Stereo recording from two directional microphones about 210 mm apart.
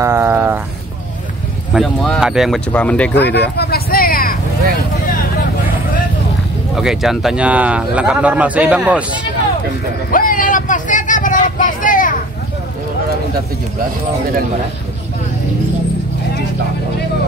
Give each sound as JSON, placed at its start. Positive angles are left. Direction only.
{"t": 0.0, "sound": "a sound", "side_deg": -10}
{"t": 1.7, "sound": "speech", "side_deg": 0}
{"t": 3.2, "sound": "vehicle", "side_deg": 55}
{"t": 6.7, "sound": "speech", "side_deg": 0}
{"t": 10.1, "sound": "vehicle", "side_deg": 40}